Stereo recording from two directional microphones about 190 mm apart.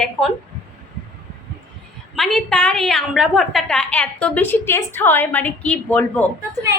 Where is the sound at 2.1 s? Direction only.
Centre (ahead or behind).